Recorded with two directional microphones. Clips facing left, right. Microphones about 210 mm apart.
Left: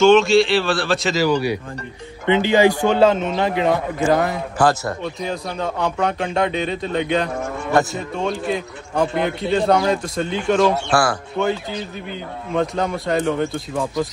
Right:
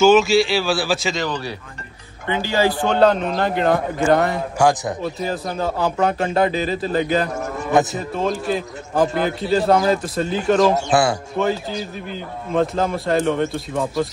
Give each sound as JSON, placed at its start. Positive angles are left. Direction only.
{"t": 0.0, "sound": "a man's voice", "side_deg": 0}
{"t": 4.6, "sound": "a man's voice", "side_deg": -10}
{"t": 10.9, "sound": "speech", "side_deg": -20}
{"t": 11.4, "sound": "a man's voice", "side_deg": 0}
{"t": 12.5, "sound": "a man's voice", "side_deg": 0}